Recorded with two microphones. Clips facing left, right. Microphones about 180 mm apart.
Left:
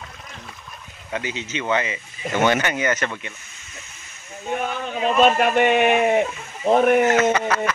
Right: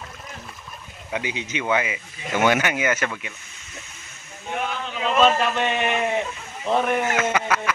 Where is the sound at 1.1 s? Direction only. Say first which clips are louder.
Even; 15° right (ahead or behind).